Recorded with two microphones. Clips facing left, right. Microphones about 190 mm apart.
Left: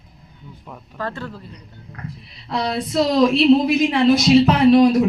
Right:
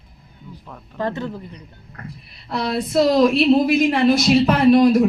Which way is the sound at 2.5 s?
55° right (ahead or behind).